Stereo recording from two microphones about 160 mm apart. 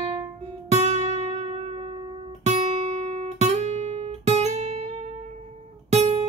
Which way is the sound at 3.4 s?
45° right (ahead or behind).